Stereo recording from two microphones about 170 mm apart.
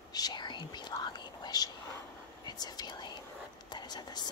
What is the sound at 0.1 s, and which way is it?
Whispering, 25° left (ahead or behind).